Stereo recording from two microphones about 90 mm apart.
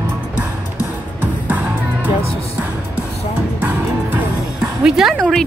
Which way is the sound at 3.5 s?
20° right (ahead or behind).